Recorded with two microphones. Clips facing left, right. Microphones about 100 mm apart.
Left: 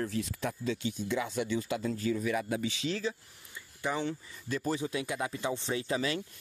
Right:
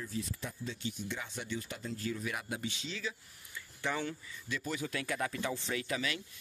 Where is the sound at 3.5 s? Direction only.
20° left (ahead or behind).